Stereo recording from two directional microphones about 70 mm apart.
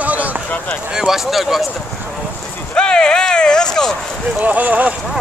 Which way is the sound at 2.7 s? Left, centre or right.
Centre.